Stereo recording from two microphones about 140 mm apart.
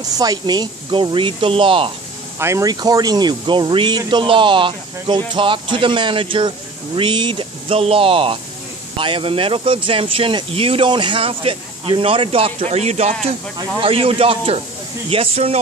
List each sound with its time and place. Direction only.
0.0 s speech: 25° right (ahead or behind)
2.3 s speech: 20° right (ahead or behind); by 13.1 s 50° right (ahead or behind)
13.6 s speech: 40° right (ahead or behind)